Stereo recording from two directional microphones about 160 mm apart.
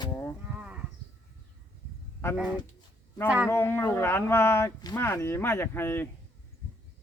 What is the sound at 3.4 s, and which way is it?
Speech, 15° left (ahead or behind).